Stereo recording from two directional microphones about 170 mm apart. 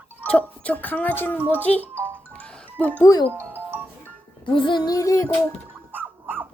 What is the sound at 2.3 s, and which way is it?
Music, 5° left (ahead or behind).